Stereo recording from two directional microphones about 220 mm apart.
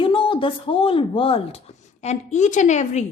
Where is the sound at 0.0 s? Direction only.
25° left (ahead or behind).